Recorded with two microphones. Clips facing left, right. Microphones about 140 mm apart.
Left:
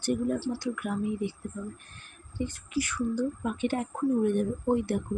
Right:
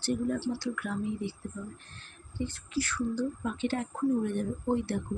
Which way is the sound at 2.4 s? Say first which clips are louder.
Left 2 dB; 15° left (ahead or behind).